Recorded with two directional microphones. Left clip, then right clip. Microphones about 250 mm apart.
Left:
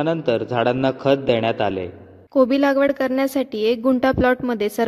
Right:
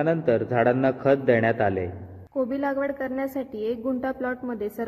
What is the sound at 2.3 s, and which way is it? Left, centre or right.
A woman's voice, left.